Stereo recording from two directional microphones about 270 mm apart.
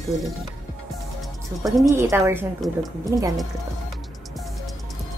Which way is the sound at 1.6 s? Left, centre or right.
Centre.